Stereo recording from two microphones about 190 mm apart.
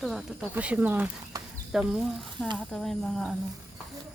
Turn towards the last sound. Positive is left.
turn(degrees=0)  # may be behind; listen again after turning